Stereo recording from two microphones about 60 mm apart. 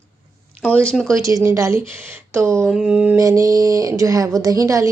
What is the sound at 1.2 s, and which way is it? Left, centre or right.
Speech, right.